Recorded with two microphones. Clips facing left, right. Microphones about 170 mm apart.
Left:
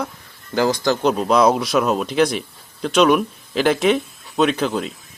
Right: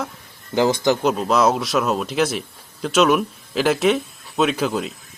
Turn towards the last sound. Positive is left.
turn(degrees=-5)  # may be behind; listen again after turning